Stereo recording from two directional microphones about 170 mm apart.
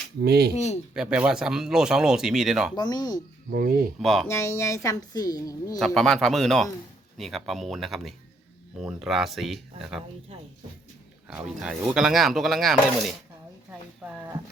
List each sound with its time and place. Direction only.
0.2 s speech: 70° right (ahead or behind)
0.5 s speech: 40° left (ahead or behind)
0.9 s speech: 5° right (ahead or behind)
2.7 s a woman's voice: 25° left (ahead or behind)
3.5 s speech: 55° right (ahead or behind)
4.0 s speech: centre (ahead or behind)
4.3 s a woman's voice: 15° left (ahead or behind)
5.8 s speech: centre (ahead or behind)
11.3 s speech: 5° right (ahead or behind)